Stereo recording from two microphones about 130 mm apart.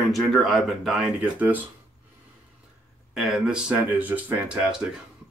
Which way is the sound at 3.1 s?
5° right (ahead or behind).